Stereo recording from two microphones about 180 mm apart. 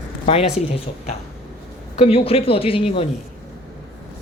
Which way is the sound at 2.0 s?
35° left (ahead or behind).